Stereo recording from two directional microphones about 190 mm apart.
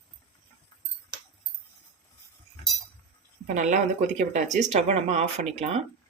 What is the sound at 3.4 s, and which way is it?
Speech, 40° right (ahead or behind).